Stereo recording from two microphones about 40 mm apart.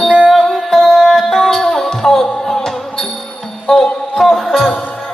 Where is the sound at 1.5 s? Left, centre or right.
Centre.